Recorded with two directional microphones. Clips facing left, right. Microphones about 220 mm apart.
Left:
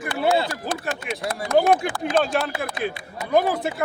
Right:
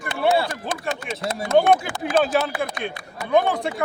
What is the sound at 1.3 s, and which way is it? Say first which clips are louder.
Speech: right 2 dB; 25° right (ahead or behind).